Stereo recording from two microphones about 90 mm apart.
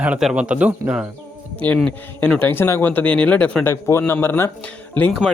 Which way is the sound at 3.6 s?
30° left (ahead or behind).